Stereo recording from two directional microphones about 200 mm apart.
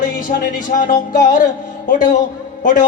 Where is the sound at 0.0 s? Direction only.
40° left (ahead or behind).